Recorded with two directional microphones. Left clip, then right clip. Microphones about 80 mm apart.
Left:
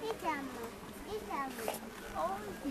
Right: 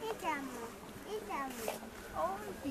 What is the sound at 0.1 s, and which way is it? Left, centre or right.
Children playing, right.